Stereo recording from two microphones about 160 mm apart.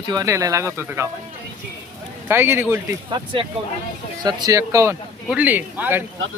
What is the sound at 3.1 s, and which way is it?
Speech, 30° right (ahead or behind).